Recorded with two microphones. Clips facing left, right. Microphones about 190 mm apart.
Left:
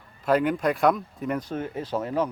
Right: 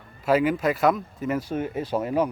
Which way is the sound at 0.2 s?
5° right (ahead or behind).